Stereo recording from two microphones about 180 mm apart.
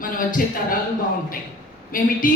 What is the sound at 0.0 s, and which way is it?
Speech, 50° left (ahead or behind).